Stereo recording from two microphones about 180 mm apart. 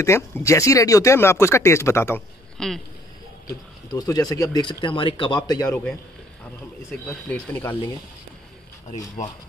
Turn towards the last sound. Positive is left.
turn(degrees=10)  # may be behind; listen again after turning